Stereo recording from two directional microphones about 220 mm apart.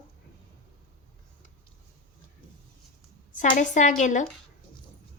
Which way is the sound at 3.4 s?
35° left (ahead or behind).